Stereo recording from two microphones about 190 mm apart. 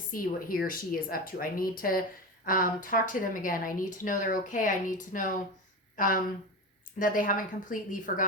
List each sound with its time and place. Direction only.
0.1 s speech: 50° left (ahead or behind)